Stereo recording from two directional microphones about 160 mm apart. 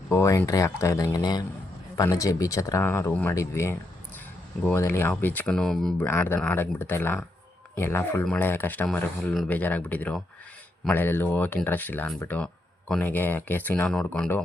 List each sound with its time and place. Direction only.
0.1 s speech: 20° left (ahead or behind)